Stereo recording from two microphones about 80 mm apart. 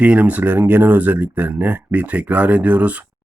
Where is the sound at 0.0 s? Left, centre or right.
Centre.